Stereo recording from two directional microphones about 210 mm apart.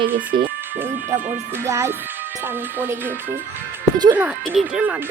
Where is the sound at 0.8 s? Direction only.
10° right (ahead or behind).